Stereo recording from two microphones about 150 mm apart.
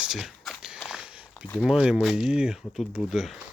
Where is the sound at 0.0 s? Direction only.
5° right (ahead or behind).